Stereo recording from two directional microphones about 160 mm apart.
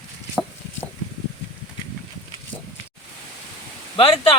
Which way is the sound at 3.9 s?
35° left (ahead or behind).